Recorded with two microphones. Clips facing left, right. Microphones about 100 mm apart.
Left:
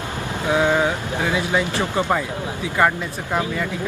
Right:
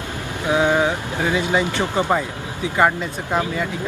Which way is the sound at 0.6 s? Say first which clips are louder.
Right 1 dB; 15° right (ahead or behind).